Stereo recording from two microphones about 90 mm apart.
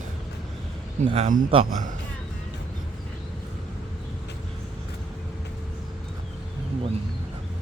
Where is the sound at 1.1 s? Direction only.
90° right.